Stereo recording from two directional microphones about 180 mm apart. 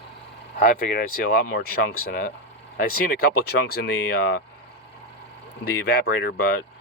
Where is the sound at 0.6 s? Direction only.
45° left (ahead or behind).